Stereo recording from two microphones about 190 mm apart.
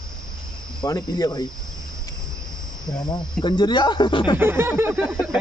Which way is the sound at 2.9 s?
25° left (ahead or behind).